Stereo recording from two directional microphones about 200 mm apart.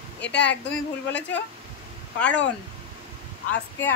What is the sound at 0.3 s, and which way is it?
Speech, 60° left (ahead or behind).